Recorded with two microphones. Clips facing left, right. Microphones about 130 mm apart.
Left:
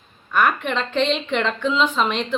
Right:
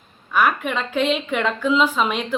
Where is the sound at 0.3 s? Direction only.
5° right (ahead or behind).